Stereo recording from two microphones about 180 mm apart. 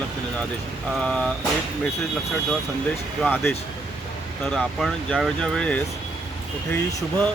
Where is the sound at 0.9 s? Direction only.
5° left (ahead or behind).